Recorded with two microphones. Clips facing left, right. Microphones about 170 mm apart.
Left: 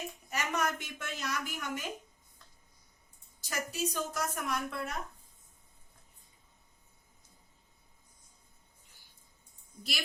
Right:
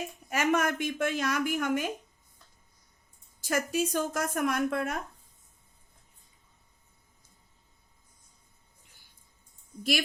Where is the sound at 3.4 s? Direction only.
55° right (ahead or behind).